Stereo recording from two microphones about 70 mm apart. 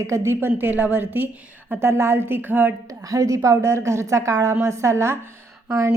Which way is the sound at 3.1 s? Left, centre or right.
Right.